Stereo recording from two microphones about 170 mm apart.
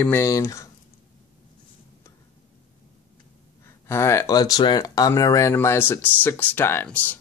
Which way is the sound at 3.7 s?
15° left (ahead or behind).